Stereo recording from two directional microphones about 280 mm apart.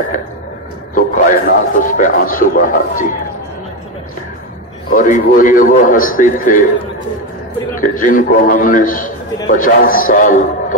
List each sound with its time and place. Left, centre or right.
0.9 s a man's voice: left
4.9 s a man's voice: left
7.7 s a man's voice: left